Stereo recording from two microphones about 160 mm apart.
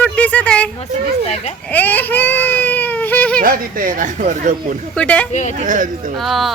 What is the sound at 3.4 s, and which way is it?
Speech, 65° right (ahead or behind).